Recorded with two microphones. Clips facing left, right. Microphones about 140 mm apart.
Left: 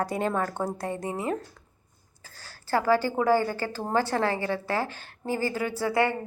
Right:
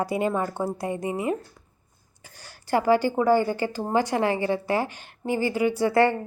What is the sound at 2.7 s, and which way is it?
A woman's voice, 15° right (ahead or behind).